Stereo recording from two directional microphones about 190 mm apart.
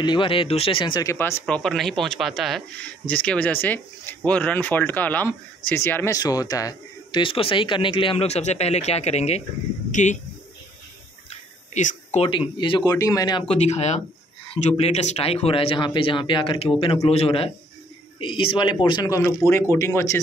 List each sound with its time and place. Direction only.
0.0 s speech: 25° left (ahead or behind)
1.1 s speech: 10° left (ahead or behind); by 10.1 s 40° left (ahead or behind)
11.2 s a sound: 40° left (ahead or behind)
12.3 s speech: 25° left (ahead or behind)
13.6 s speech: 35° left (ahead or behind); by 19.3 s 15° left (ahead or behind)